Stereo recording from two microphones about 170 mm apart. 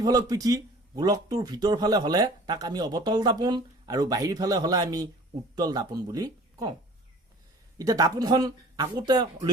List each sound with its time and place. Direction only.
0.0 s a man's voice: 20° right (ahead or behind)
7.8 s a man's voice: 20° right (ahead or behind)